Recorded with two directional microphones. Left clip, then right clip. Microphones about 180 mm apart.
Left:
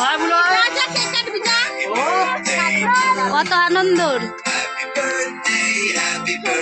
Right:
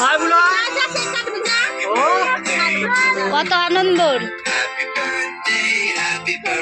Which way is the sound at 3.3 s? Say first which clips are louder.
Left 1 dB; 5° left (ahead or behind).